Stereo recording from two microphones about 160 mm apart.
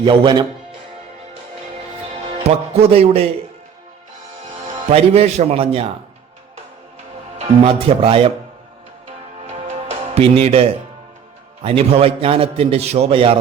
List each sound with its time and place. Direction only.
0.0 s speech: 30° right (ahead or behind)
2.4 s a man's voice: 40° right (ahead or behind)
4.9 s a man's voice: 40° right (ahead or behind)
7.3 s a man's voice: 40° right (ahead or behind)
9.5 s music: 45° right (ahead or behind)
11.6 s a man's voice: 35° right (ahead or behind)